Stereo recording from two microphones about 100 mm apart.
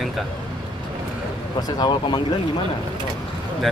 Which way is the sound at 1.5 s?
40° left (ahead or behind).